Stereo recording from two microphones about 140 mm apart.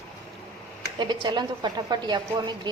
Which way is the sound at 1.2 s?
30° right (ahead or behind).